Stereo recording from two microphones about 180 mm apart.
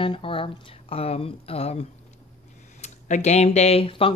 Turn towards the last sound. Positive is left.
turn(degrees=30)  # may be behind; listen again after turning